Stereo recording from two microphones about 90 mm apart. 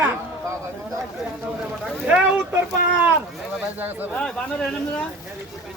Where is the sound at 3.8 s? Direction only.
20° right (ahead or behind).